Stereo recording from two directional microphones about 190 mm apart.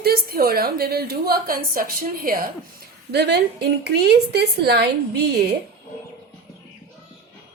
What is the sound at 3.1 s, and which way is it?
A woman's voice, 60° right (ahead or behind).